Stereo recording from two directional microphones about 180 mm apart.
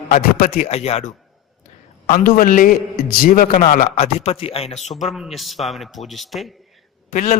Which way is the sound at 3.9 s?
35° left (ahead or behind).